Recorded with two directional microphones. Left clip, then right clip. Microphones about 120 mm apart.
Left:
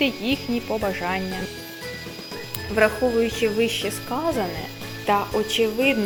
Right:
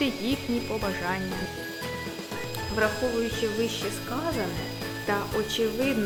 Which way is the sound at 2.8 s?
50° left (ahead or behind).